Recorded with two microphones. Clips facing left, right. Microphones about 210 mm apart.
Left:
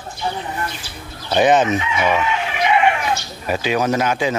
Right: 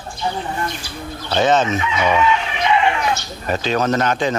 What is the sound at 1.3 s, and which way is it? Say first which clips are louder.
Speech: left 2 dB; 15° left (ahead or behind).